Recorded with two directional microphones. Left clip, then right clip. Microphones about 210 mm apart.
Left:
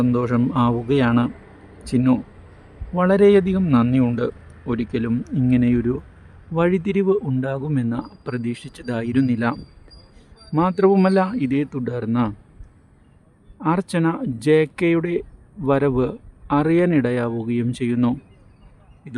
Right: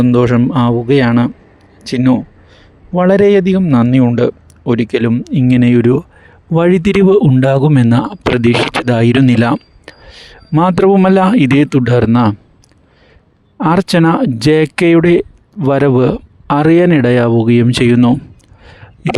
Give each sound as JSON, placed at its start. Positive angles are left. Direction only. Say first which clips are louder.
{"t": 0.0, "sound": "a man's voice", "louder": "right 10 dB", "side_deg": -35}
{"t": 13.6, "sound": "speech", "louder": "right 10 dB", "side_deg": -45}